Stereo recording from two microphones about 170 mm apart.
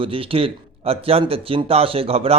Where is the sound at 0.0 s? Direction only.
35° right (ahead or behind).